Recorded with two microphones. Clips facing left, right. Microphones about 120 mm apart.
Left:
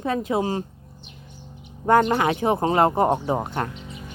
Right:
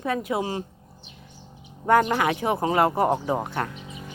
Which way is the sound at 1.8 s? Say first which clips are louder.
Left 2 dB; 25° left (ahead or behind).